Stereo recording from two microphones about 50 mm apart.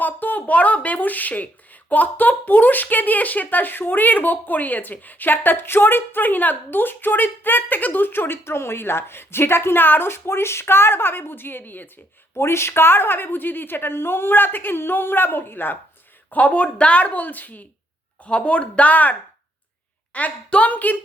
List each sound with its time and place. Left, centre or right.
0.0 s speech: left
12.3 s speech: left
16.3 s speech: left
18.2 s speech: left
20.1 s speech: left